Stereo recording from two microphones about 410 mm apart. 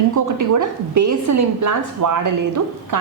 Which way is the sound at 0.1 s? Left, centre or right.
Right.